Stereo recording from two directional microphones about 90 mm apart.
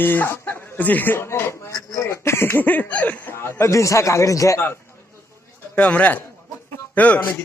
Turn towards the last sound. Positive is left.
turn(degrees=15)  # may be behind; listen again after turning